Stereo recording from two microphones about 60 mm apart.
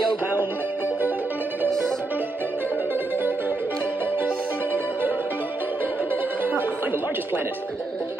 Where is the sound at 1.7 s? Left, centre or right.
Centre.